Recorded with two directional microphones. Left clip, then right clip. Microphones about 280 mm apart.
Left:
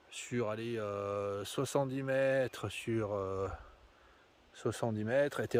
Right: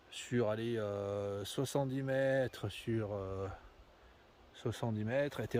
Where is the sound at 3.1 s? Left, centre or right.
Left.